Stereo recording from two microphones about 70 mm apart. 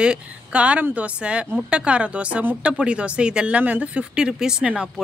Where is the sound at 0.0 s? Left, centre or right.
Centre.